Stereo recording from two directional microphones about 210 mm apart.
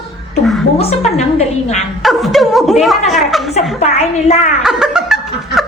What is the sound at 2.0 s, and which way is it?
Speech, centre (ahead or behind).